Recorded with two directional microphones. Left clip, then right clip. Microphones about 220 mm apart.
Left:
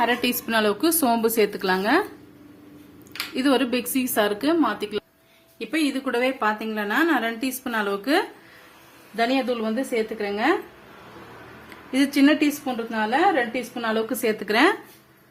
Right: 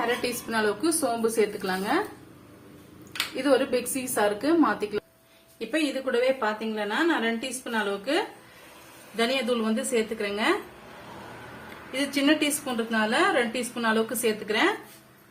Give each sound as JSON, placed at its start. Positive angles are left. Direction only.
{"t": 0.2, "sound": "a woman's voice", "side_deg": 50}
{"t": 3.3, "sound": "a woman's voice", "side_deg": 45}
{"t": 9.1, "sound": "a woman's voice", "side_deg": 30}
{"t": 11.9, "sound": "speech", "side_deg": 40}
{"t": 12.6, "sound": "a woman's voice", "side_deg": 20}
{"t": 14.4, "sound": "a woman's voice", "side_deg": 50}